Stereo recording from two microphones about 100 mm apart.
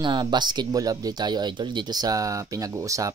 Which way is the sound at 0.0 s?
50° right (ahead or behind).